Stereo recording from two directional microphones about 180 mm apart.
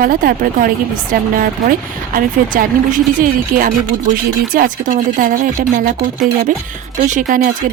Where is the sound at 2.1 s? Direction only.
50° right (ahead or behind).